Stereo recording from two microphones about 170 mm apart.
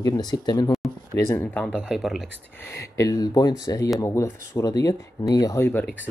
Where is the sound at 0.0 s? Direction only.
20° left (ahead or behind).